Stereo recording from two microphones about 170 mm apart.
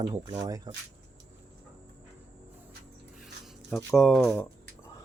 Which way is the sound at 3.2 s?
Centre (ahead or behind).